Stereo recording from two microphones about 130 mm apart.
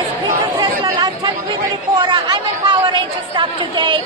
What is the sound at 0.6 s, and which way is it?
Chatter, 35° right (ahead or behind).